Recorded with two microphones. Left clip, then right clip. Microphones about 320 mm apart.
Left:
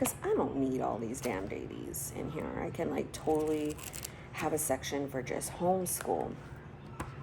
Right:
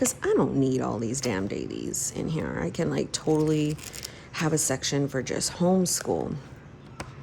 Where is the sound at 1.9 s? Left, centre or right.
Right.